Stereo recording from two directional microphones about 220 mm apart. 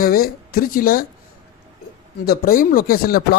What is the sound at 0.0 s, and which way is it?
Speech, 40° left (ahead or behind).